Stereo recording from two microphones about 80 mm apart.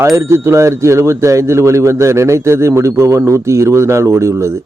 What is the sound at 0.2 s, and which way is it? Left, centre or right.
Speech, right.